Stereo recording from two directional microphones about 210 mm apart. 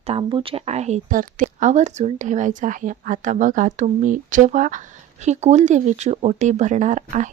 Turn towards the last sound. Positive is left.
turn(degrees=-35)  # may be behind; listen again after turning